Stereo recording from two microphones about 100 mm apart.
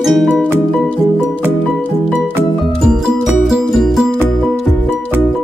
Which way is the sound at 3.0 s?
10° right (ahead or behind).